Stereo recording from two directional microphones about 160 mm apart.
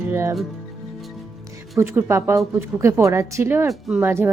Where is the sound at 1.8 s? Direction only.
15° right (ahead or behind).